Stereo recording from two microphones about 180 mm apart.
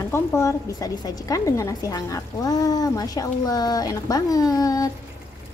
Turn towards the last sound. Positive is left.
turn(degrees=20)  # may be behind; listen again after turning